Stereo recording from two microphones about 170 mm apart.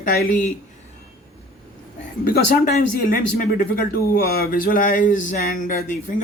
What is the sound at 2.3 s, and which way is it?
Speech, 65° left (ahead or behind).